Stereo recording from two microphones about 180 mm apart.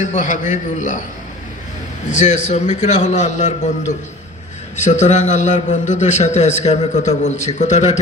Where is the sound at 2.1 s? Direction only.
40° left (ahead or behind).